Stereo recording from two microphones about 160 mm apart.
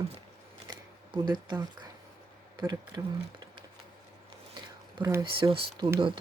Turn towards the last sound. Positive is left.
turn(degrees=-30)  # may be behind; listen again after turning